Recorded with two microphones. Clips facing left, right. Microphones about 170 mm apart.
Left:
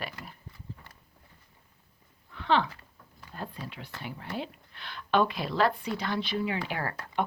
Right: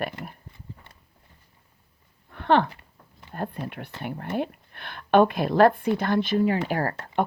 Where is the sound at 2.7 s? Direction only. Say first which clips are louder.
Right 2 dB; 20° right (ahead or behind).